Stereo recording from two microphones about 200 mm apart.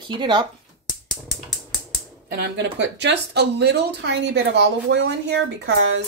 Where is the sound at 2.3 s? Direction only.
55° right (ahead or behind).